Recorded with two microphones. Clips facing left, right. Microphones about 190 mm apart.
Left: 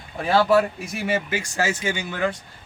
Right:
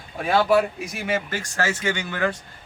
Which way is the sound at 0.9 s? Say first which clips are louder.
Left 3 dB; 5° left (ahead or behind).